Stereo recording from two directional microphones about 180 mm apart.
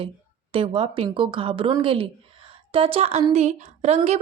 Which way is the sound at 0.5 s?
30° right (ahead or behind).